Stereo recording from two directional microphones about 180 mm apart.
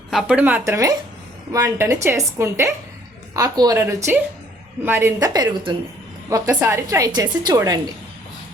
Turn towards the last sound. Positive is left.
turn(degrees=-20)  # may be behind; listen again after turning